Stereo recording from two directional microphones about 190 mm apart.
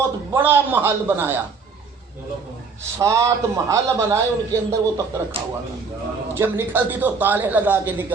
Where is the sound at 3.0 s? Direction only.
15° right (ahead or behind).